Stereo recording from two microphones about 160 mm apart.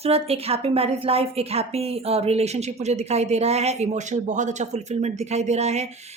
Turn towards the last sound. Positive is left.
turn(degrees=-45)  # may be behind; listen again after turning